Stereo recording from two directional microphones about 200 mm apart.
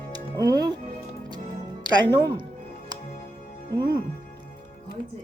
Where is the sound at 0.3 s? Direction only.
20° right (ahead or behind).